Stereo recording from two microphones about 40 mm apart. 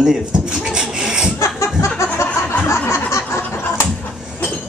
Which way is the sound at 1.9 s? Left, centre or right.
Left.